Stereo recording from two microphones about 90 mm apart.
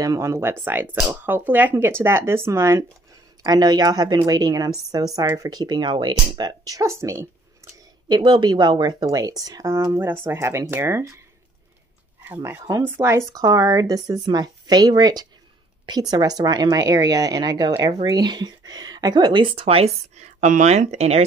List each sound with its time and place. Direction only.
0.0 s speech: 40° right (ahead or behind)
3.4 s speech: 50° right (ahead or behind); by 7.2 s 30° right (ahead or behind)
8.1 s speech: 60° right (ahead or behind)
9.9 s speech: 25° right (ahead or behind)
12.4 s speech: 35° right (ahead or behind)
13.3 s speech: 40° right (ahead or behind); by 19.8 s 90° right